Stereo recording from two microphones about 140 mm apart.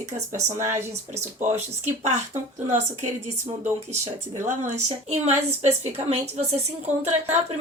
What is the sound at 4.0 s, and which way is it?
Speech, 50° right (ahead or behind).